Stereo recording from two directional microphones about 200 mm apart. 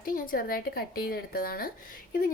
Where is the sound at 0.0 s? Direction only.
45° left (ahead or behind).